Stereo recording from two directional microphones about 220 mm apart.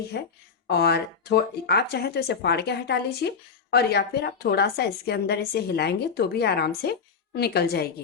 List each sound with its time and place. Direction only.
0.1 s a woman's voice: 50° left (ahead or behind)